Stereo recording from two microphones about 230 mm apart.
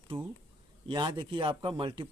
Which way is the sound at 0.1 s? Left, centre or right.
Centre.